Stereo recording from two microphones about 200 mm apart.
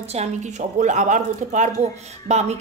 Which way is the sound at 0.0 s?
30° right (ahead or behind).